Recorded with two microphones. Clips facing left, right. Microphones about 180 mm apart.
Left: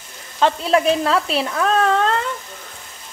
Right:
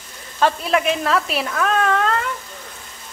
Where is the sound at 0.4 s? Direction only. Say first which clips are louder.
Left 2 dB; 25° left (ahead or behind).